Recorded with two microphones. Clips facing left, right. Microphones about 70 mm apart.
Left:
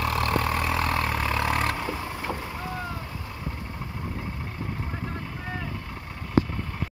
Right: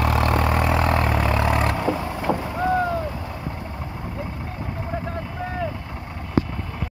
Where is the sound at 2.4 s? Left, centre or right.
Right.